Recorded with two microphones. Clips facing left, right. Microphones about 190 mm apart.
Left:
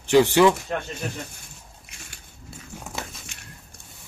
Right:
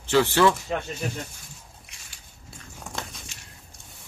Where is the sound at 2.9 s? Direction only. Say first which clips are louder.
Even; centre (ahead or behind).